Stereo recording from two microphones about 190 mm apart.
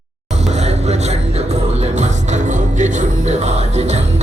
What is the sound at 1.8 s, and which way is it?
Music, 40° right (ahead or behind).